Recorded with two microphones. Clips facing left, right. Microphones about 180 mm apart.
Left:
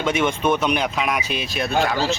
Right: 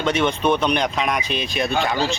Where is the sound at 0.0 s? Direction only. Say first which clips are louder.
Right 1 dB; 10° left (ahead or behind).